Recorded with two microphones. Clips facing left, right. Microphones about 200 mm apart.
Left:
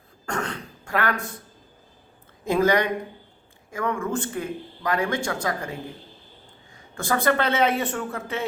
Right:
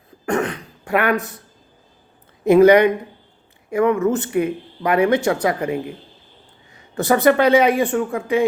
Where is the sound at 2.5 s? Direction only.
20° right (ahead or behind).